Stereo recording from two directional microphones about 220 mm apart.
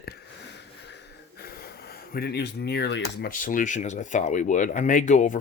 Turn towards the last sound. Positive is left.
turn(degrees=35)  # may be behind; listen again after turning